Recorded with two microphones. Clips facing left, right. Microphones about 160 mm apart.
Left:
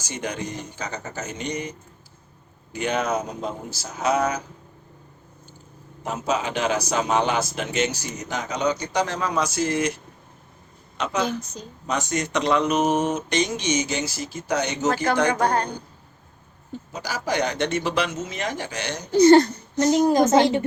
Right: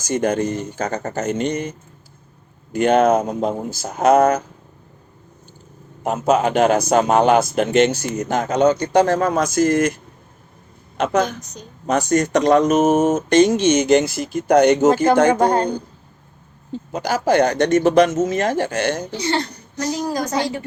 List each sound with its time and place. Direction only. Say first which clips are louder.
0.0 s a man's voice: right 11 dB; 50° right (ahead or behind)
2.7 s a man's voice: right 10 dB; 55° right (ahead or behind)
6.0 s a man's voice: right 8 dB; 55° right (ahead or behind)
10.9 s a man's voice: right 6 dB; 50° right (ahead or behind)
15.4 s a woman's voice: right 6 dB; 25° right (ahead or behind)
16.9 s a man's voice: right 9 dB; 55° right (ahead or behind)
19.1 s speech: left 10 dB; 45° left (ahead or behind)
19.7 s a woman's voice: left 5 dB; 25° left (ahead or behind)